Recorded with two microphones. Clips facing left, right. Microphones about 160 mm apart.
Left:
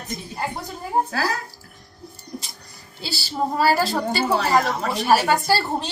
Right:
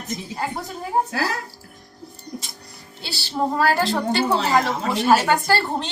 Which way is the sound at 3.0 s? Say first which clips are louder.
Right 1 dB; centre (ahead or behind).